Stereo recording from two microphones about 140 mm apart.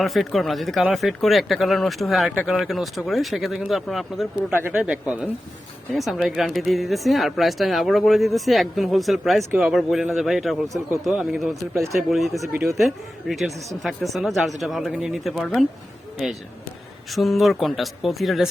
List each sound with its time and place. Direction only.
0.0 s speech: centre (ahead or behind)
4.5 s speech: 10° right (ahead or behind)
11.7 s speech: 20° right (ahead or behind)
11.9 s speech: centre (ahead or behind)
17.1 s speech: centre (ahead or behind)